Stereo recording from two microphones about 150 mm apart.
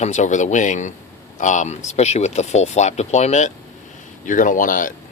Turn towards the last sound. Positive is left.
turn(degrees=65)  # may be behind; listen again after turning